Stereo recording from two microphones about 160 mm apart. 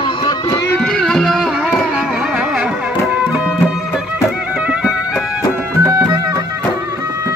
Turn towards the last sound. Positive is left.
turn(degrees=-20)  # may be behind; listen again after turning